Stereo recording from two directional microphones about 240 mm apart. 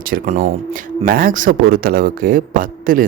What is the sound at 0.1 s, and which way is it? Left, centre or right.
Speech, right.